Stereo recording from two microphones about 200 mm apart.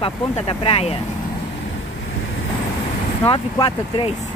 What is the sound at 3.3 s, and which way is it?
Speech, 25° left (ahead or behind).